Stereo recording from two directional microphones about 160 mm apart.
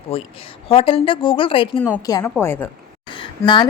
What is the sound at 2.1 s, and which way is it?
Speech, 25° left (ahead or behind).